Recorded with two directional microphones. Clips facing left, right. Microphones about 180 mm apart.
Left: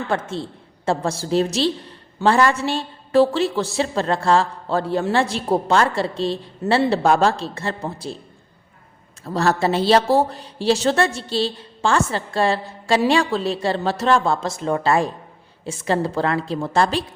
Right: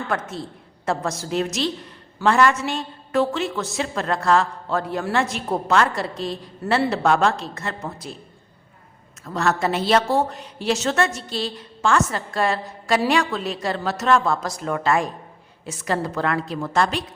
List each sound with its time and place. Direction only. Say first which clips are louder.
0.1 s a woman's voice: left 3 dB; 30° left (ahead or behind)
9.2 s a woman's voice: left 3 dB; 35° left (ahead or behind)